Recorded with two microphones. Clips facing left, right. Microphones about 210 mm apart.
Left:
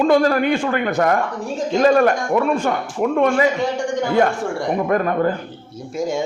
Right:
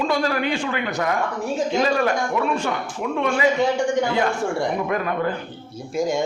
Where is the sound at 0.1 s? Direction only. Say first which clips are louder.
Left 7 dB; 50° left (ahead or behind).